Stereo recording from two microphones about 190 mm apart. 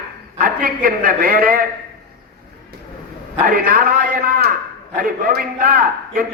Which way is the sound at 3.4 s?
45° right (ahead or behind).